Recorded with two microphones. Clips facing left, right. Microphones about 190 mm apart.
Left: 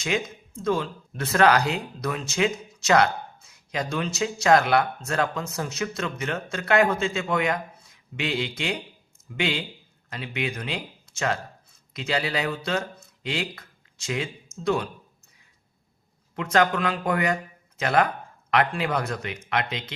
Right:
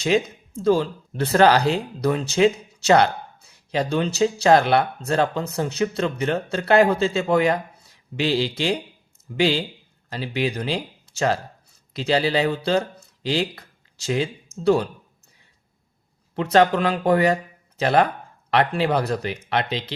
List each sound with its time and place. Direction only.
0.0 s speech: 35° right (ahead or behind)
16.3 s speech: 30° right (ahead or behind)